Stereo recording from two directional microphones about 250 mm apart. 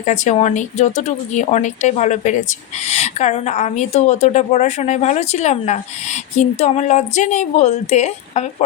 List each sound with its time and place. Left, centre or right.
0.0 s a woman's voice: left